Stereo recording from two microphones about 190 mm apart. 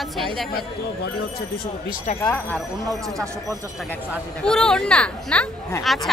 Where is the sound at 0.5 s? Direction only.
55° left (ahead or behind).